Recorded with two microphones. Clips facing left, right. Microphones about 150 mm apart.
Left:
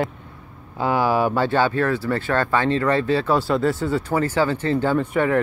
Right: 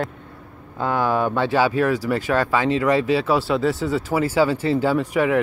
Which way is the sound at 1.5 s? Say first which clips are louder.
Right 1 dB; 10° right (ahead or behind).